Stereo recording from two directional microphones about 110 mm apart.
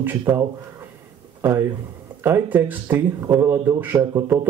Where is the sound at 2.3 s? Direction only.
15° right (ahead or behind).